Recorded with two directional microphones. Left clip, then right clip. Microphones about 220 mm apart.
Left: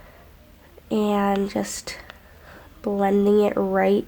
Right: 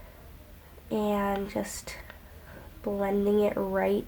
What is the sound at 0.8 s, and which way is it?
Speech, 45° left (ahead or behind).